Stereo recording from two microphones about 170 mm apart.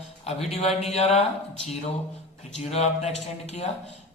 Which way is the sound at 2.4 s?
40° left (ahead or behind).